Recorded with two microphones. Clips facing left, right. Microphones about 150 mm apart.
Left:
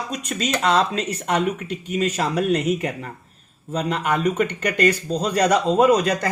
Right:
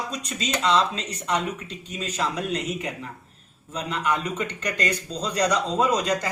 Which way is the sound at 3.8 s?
55° left (ahead or behind).